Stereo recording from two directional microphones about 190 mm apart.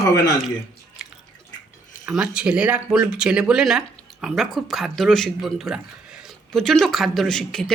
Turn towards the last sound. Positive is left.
turn(degrees=0)  # may be behind; listen again after turning